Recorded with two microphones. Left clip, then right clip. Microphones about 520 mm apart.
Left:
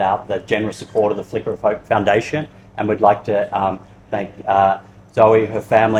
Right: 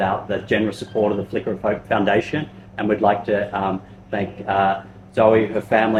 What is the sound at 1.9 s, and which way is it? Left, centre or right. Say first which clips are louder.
Speech: left 2 dB; left.